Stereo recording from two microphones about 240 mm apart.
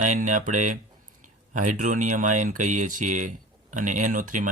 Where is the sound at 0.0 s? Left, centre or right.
Right.